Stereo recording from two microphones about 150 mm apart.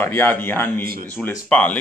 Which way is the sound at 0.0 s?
15° left (ahead or behind).